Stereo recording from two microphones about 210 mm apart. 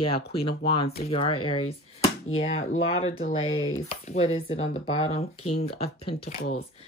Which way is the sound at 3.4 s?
75° left (ahead or behind).